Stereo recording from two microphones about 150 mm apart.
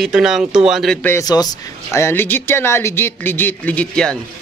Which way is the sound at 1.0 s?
15° left (ahead or behind).